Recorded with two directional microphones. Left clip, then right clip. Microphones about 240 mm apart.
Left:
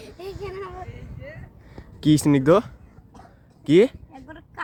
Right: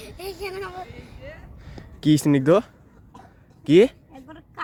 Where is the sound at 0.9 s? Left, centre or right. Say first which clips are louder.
Even; centre.